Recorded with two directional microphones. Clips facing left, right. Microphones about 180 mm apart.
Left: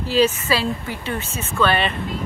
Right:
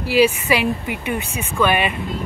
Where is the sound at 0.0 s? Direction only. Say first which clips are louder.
Right 2 dB; 10° right (ahead or behind).